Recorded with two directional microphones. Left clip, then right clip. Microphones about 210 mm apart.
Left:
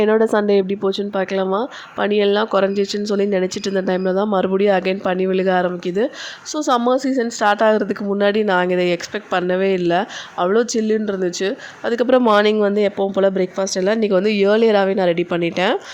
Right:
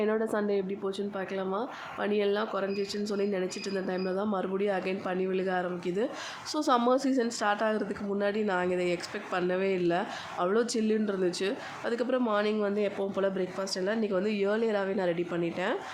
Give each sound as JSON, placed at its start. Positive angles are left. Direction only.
{"t": 0.0, "sound": "speech", "side_deg": 45}